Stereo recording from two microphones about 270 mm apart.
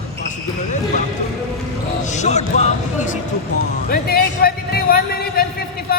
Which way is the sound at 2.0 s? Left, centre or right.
Left.